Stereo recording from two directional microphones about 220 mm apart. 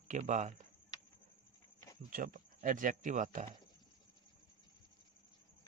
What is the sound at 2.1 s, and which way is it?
Speech, 40° right (ahead or behind).